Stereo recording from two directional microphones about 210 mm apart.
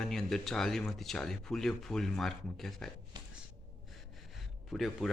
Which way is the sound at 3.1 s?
20° right (ahead or behind).